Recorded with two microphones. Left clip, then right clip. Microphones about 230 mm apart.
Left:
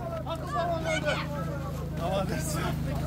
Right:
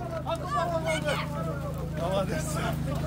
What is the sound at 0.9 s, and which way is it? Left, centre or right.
Vehicle, right.